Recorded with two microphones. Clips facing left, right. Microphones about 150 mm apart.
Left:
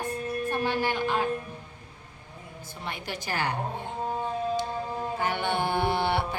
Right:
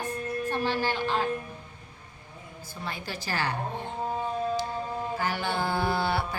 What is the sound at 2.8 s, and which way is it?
Speech, 20° left (ahead or behind).